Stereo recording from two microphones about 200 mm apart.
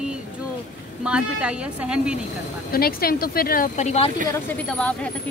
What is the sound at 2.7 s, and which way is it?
Speech, 50° left (ahead or behind).